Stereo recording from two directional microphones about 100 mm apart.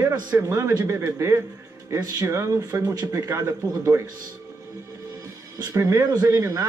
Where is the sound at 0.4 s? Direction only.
30° right (ahead or behind).